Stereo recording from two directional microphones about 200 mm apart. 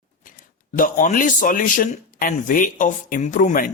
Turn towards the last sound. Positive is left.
turn(degrees=40)  # may be behind; listen again after turning